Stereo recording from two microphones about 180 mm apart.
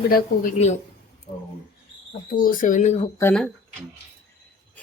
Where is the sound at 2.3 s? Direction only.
50° left (ahead or behind).